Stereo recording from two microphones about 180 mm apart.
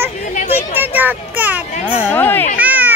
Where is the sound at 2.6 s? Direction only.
10° right (ahead or behind).